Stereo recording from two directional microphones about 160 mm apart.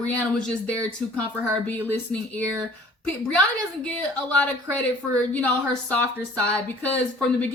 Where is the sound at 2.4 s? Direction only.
20° right (ahead or behind).